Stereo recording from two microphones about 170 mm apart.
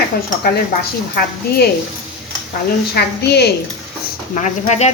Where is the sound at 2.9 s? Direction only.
75° left (ahead or behind).